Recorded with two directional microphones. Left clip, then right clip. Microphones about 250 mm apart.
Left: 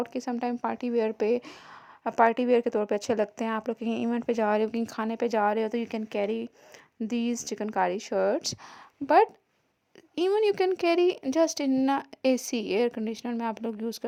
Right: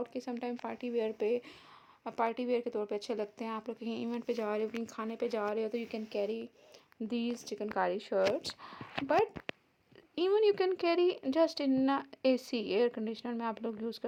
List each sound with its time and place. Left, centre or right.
0.0 s a woman's voice: left